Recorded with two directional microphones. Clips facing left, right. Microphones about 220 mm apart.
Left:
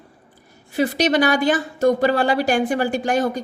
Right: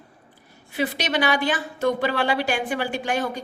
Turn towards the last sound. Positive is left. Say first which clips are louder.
# left 5 dB
turn(degrees=40)  # may be behind; listen again after turning